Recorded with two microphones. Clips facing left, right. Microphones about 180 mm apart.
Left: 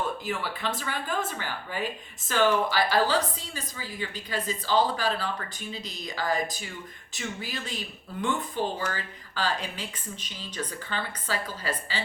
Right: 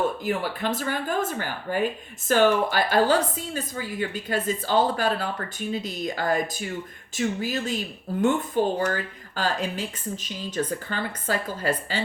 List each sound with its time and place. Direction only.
0.3 s speech: 45° right (ahead or behind)